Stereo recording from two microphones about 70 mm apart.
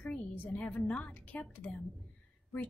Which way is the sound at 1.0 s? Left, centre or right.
Left.